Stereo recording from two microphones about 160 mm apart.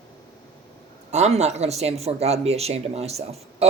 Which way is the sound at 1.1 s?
45° right (ahead or behind).